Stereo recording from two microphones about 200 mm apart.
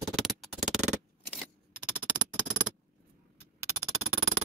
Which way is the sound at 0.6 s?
35° right (ahead or behind).